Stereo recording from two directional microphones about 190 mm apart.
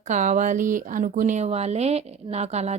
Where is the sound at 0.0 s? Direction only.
40° right (ahead or behind).